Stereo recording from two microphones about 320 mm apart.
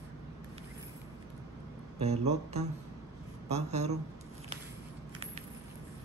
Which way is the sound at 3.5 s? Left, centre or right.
Centre.